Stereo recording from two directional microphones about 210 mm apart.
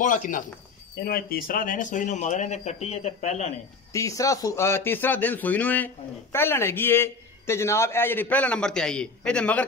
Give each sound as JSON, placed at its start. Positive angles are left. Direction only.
{"t": 0.0, "sound": "speech", "side_deg": 40}
{"t": 3.9, "sound": "a man's voice", "side_deg": 15}